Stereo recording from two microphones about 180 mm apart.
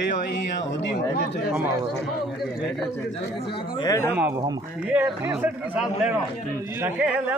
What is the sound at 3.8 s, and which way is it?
Speech, 20° left (ahead or behind).